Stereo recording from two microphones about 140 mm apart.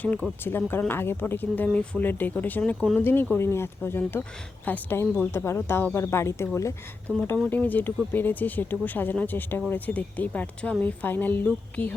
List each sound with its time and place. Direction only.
0.0 s speech: 10° left (ahead or behind)